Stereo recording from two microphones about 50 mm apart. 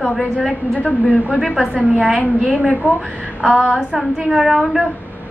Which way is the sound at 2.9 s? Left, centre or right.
Centre.